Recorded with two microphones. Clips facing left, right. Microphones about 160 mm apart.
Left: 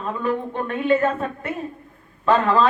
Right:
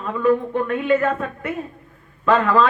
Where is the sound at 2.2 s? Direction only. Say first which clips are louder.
Right 1 dB; 30° left (ahead or behind).